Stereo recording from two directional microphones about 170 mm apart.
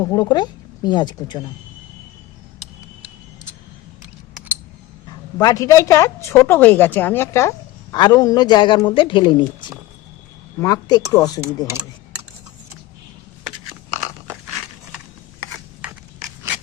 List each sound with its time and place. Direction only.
0.0 s a woman's voice: 20° left (ahead or behind)
5.4 s a woman's voice: 20° left (ahead or behind)
10.6 s a woman's voice: 20° left (ahead or behind)